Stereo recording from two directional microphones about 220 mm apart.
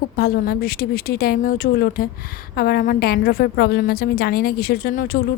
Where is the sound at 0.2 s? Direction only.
45° left (ahead or behind).